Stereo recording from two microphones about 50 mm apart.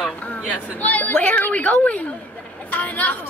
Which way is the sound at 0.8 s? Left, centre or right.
Left.